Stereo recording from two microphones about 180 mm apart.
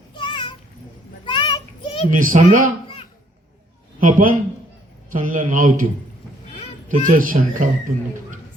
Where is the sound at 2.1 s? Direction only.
50° right (ahead or behind).